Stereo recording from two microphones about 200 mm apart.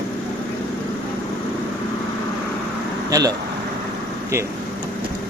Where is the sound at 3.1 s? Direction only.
20° right (ahead or behind).